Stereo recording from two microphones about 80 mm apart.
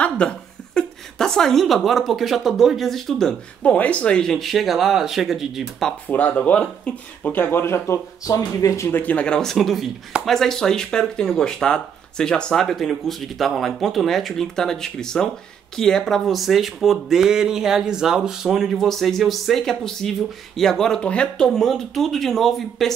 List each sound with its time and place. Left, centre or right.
0.0 s speech: centre
6.0 s speech: centre; by 8.9 s left
8.9 s speech: centre
21.5 s speech: centre